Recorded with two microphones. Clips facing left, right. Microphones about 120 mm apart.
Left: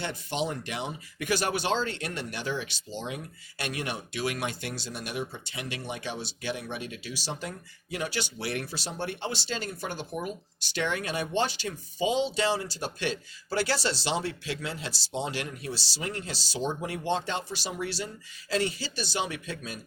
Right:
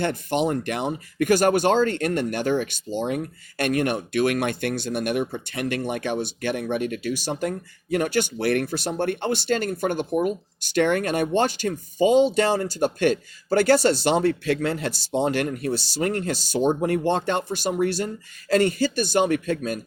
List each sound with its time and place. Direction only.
0.0 s speech: 55° right (ahead or behind)